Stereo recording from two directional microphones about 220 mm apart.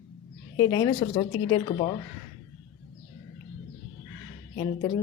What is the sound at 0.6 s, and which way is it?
A woman's voice, 20° left (ahead or behind).